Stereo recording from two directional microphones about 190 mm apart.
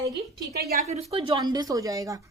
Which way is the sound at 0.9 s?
35° right (ahead or behind).